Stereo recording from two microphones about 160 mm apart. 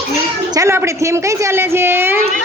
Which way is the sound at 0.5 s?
20° right (ahead or behind).